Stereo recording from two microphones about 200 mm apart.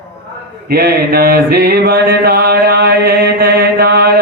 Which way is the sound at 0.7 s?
50° right (ahead or behind).